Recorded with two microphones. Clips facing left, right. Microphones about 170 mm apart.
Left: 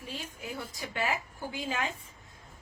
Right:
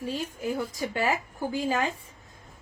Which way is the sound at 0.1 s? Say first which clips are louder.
Right 8 dB; 40° right (ahead or behind).